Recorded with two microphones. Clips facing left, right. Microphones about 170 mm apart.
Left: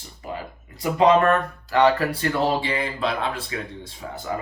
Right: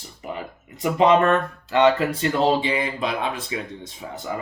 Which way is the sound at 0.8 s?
20° right (ahead or behind).